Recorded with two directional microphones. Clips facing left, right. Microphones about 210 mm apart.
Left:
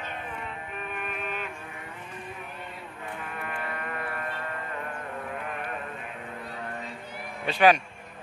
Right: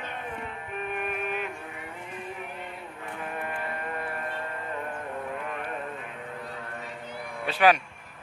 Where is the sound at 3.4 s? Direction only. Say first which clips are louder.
Left 1 dB; 30° right (ahead or behind).